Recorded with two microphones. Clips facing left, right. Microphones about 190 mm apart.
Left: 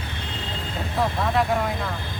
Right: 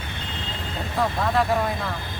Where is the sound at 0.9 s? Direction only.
Centre (ahead or behind).